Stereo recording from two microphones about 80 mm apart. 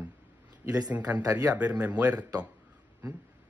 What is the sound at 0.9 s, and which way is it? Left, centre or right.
Speech, centre.